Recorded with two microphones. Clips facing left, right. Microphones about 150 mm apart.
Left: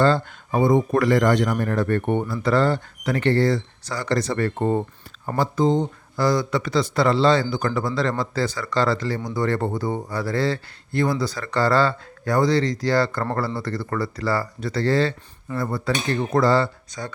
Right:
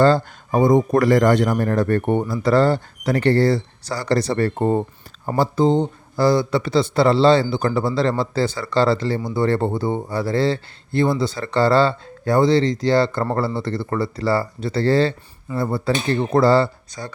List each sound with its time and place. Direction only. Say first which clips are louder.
0.0 s speech: right 4 dB; 40° right (ahead or behind)